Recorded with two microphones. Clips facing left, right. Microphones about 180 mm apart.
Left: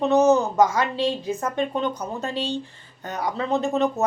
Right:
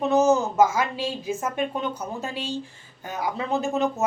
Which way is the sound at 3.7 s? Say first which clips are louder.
Left 2 dB; 5° right (ahead or behind).